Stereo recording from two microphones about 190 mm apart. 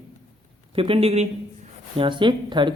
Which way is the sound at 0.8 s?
30° right (ahead or behind).